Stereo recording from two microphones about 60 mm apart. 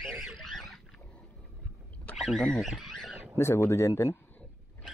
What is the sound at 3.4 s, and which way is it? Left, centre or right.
Speech, left.